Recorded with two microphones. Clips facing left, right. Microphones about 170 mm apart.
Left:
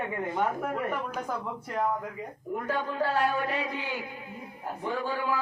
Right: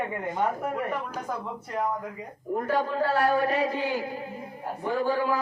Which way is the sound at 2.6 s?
40° right (ahead or behind).